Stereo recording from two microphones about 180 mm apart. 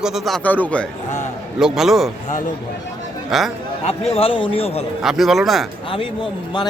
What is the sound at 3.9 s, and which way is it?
Speech, 35° left (ahead or behind).